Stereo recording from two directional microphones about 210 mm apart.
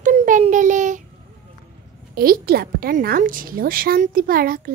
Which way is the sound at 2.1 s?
45° right (ahead or behind).